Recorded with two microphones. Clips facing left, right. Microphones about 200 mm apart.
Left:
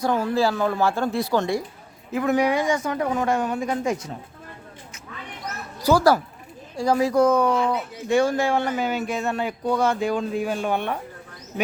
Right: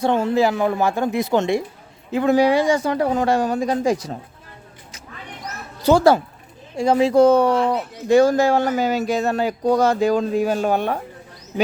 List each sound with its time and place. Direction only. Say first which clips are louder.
0.0 s a woman's voice: right 4 dB; 25° right (ahead or behind)
5.8 s a woman's voice: right 4 dB; 25° right (ahead or behind)